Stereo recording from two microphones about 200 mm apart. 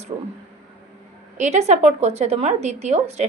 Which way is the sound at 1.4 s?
35° right (ahead or behind).